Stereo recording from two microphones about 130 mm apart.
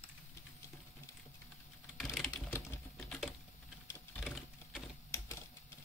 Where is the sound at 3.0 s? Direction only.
Centre (ahead or behind).